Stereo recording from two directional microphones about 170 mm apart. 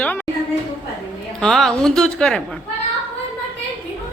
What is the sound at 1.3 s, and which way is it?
A woman's voice, centre (ahead or behind).